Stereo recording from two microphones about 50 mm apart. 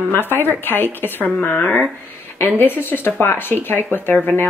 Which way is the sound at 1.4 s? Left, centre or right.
Left.